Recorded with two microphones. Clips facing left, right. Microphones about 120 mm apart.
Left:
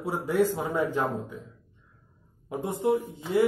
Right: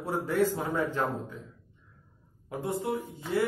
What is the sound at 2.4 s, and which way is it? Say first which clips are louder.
Speech: left 5 dB; 20° left (ahead or behind).